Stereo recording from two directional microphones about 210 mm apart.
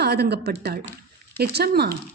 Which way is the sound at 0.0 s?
50° right (ahead or behind).